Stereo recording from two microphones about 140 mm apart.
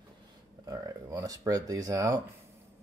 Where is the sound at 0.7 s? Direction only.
25° right (ahead or behind).